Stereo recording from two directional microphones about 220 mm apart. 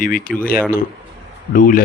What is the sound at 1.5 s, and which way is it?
Speech, 40° left (ahead or behind).